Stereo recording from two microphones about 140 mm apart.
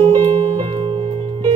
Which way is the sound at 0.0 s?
45° right (ahead or behind).